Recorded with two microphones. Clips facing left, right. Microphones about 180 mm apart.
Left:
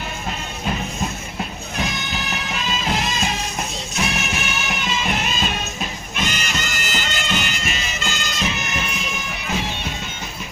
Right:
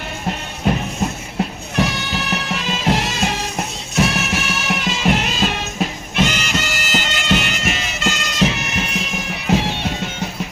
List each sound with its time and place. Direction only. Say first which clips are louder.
1.7 s music: right 6 dB; 70° right (ahead or behind)
6.1 s bagpipes: right 7 dB; 80° right
9.5 s music: right 8 dB; 70° right (ahead or behind)